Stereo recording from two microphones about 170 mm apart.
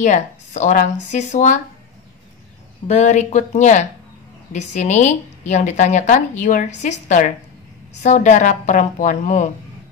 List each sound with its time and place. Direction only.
0.0 s a woman's voice: 45° left (ahead or behind)
2.9 s a woman's voice: 40° left (ahead or behind)